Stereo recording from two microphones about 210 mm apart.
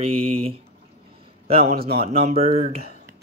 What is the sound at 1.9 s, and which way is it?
Speech, 30° right (ahead or behind).